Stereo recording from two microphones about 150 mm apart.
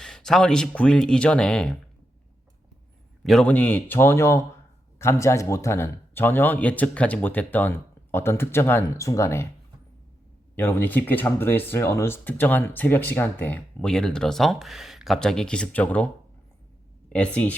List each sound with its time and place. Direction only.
0.0 s speech: 5° left (ahead or behind)
3.2 s speech: 5° left (ahead or behind)
10.5 s speech: 15° left (ahead or behind)
17.1 s speech: 10° left (ahead or behind)